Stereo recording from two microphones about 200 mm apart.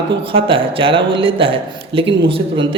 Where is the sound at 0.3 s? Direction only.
25° right (ahead or behind).